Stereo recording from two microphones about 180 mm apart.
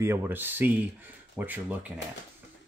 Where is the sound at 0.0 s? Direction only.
15° right (ahead or behind).